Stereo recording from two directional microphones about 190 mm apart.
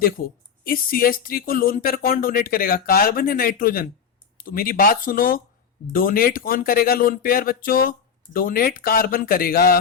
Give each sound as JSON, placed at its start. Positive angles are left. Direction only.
{"t": 0.2, "sound": "speech", "side_deg": 45}